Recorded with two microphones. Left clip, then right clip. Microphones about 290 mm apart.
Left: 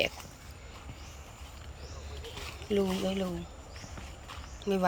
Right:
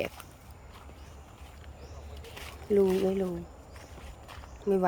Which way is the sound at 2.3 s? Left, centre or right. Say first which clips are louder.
Right 4 dB; centre.